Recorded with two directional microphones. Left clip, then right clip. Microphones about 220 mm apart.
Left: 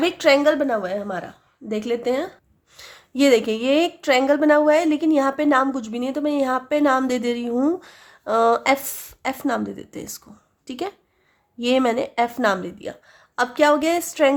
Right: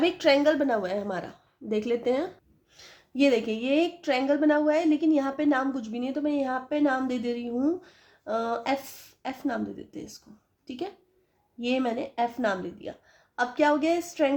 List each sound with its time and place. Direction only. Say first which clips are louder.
0.0 s a woman's voice: left 5 dB; 20° left (ahead or behind)
2.7 s a woman's voice: left 5 dB; 25° left (ahead or behind)